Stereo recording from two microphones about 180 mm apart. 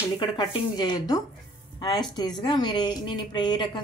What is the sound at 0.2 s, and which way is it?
A woman's voice, 25° left (ahead or behind).